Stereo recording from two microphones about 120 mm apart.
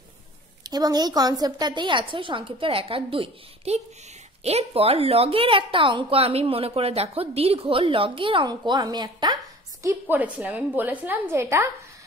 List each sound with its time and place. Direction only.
0.7 s a woman's voice: 35° right (ahead or behind)
9.8 s a woman's voice: 15° right (ahead or behind)